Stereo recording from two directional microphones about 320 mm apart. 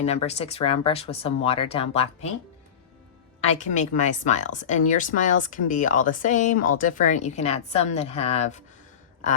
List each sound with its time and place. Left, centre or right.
0.0 s speech: centre
3.6 s speech: left